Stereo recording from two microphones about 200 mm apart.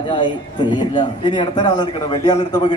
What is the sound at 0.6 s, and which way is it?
A man's voice, 25° left (ahead or behind).